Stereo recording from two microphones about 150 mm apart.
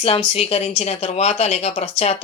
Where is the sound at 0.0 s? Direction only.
40° left (ahead or behind).